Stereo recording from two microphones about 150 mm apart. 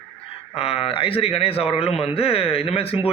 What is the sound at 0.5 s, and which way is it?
A man's voice, 40° left (ahead or behind).